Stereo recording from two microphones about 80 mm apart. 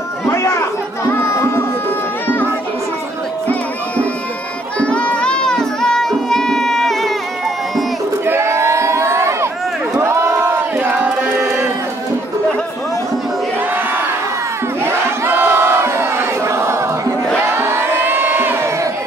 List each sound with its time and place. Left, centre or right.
0.3 s chatter: left
1.1 s music: left
4.7 s music: centre
8.3 s crowd: right
11.0 s music: centre
14.9 s battle cry: right
17.6 s crowd: right